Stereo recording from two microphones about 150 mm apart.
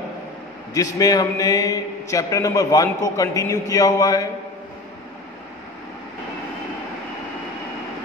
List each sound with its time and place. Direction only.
0.7 s a man's voice: 25° left (ahead or behind)